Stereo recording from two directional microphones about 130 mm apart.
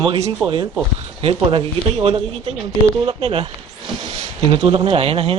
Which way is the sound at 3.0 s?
45° right (ahead or behind).